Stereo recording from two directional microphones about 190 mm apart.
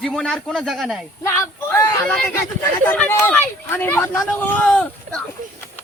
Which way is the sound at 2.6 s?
10° left (ahead or behind).